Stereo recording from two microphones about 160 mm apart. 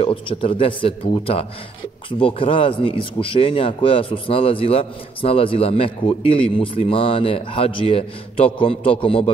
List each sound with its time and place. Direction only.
0.0 s a man's voice: 35° left (ahead or behind)